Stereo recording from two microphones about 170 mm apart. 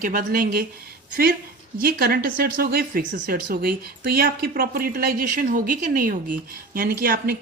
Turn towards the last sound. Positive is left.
turn(degrees=-60)  # may be behind; listen again after turning